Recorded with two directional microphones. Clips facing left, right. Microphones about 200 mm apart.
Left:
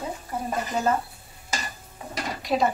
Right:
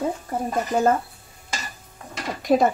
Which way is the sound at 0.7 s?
50° right (ahead or behind).